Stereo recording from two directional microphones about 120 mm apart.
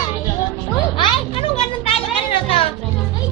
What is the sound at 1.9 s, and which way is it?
Music, 55° left (ahead or behind).